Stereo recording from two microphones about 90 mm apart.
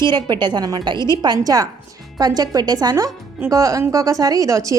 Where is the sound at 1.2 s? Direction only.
45° right (ahead or behind).